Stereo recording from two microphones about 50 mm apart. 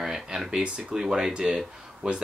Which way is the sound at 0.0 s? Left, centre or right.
Centre.